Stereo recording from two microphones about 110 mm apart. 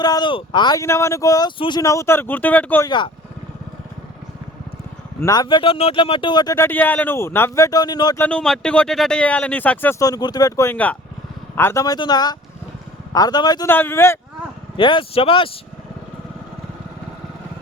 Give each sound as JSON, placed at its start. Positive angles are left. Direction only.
{"t": 0.0, "sound": "speech", "side_deg": 40}
{"t": 0.8, "sound": "speech", "side_deg": 25}
{"t": 1.5, "sound": "speech", "side_deg": 45}
{"t": 1.8, "sound": "speech", "side_deg": 30}
{"t": 2.8, "sound": "speech", "side_deg": 45}
{"t": 5.2, "sound": "speech", "side_deg": 35}
{"t": 5.7, "sound": "speech", "side_deg": 60}
{"t": 6.6, "sound": "speech", "side_deg": 15}
{"t": 8.2, "sound": "speech", "side_deg": 10}
{"t": 10.0, "sound": "speech", "side_deg": 35}
{"t": 10.7, "sound": "speech", "side_deg": 15}
{"t": 11.9, "sound": "speech", "side_deg": 40}
{"t": 13.7, "sound": "speech", "side_deg": 20}
{"t": 14.8, "sound": "speech", "side_deg": 45}